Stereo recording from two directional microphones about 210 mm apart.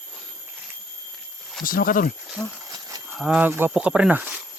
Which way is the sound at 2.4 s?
Centre (ahead or behind).